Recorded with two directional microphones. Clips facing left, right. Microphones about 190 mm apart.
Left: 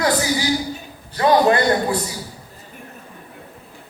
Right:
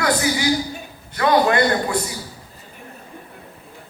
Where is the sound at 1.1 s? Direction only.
30° left (ahead or behind).